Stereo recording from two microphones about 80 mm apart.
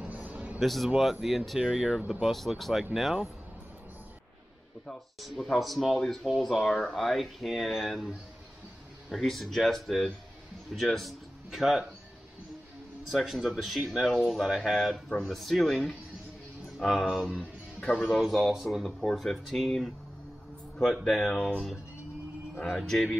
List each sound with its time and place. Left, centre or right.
0.0 s a sound: right
0.6 s speech: centre
2.3 s speech: centre
5.2 s speech: centre
9.1 s a man's voice: centre
13.1 s speech: centre
16.6 s a sound: centre
17.3 s music: centre
18.0 s speech: centre
22.7 s speech: centre